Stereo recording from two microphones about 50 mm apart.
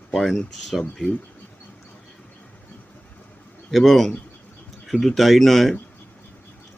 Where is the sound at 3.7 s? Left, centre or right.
Centre.